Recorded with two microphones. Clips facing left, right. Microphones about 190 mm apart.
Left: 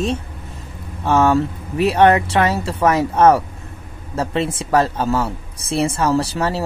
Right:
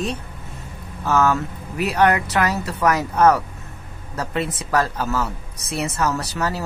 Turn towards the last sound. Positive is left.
turn(degrees=30)  # may be behind; listen again after turning